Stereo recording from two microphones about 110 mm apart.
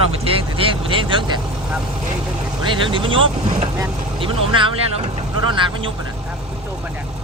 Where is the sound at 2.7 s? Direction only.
50° right (ahead or behind).